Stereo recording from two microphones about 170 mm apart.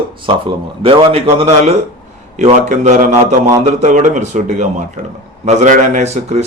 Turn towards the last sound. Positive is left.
turn(degrees=-40)  # may be behind; listen again after turning